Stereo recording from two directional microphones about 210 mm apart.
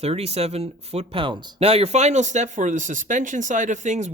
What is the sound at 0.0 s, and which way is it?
Speech, 30° right (ahead or behind).